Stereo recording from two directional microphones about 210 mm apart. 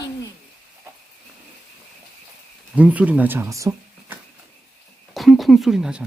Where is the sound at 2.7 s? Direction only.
5° right (ahead or behind).